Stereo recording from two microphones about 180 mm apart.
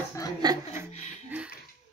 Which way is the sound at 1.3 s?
10° right (ahead or behind).